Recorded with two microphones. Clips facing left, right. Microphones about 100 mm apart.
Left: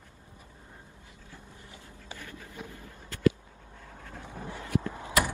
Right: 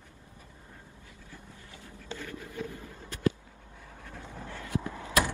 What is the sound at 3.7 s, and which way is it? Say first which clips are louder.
Vehicle: left 1 dB; 50° left (ahead or behind).